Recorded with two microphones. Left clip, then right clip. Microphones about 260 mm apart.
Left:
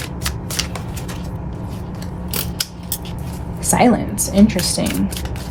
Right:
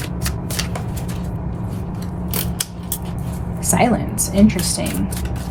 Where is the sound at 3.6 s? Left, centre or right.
Left.